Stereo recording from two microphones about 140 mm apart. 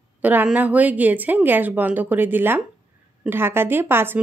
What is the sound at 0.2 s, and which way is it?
A woman's voice, 10° right (ahead or behind).